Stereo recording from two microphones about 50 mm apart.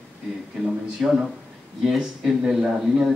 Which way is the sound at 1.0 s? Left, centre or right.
Centre.